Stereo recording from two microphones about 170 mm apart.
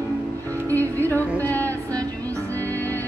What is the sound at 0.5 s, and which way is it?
Music, 15° right (ahead or behind).